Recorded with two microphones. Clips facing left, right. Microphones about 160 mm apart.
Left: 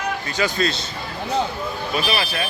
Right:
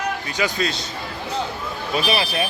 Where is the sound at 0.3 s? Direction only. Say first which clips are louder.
Left 2 dB; 15° right (ahead or behind).